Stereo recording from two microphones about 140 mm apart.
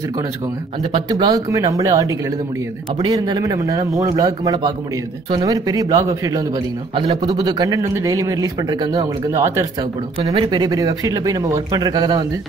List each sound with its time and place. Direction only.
1.0 s speech: 30° right (ahead or behind)